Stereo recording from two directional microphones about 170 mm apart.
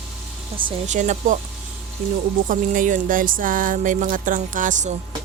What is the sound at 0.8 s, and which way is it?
Speech, 45° right (ahead or behind).